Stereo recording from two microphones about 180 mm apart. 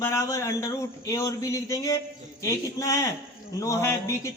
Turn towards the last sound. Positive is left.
turn(degrees=15)  # may be behind; listen again after turning